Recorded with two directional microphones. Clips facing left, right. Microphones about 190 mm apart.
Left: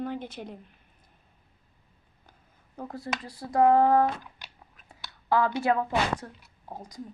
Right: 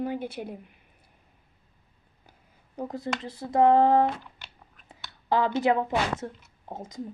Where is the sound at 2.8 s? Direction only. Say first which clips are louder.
Right 3 dB; 20° right (ahead or behind).